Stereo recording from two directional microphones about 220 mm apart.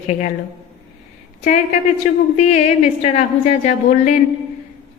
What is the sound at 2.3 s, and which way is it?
A woman's voice, 30° left (ahead or behind).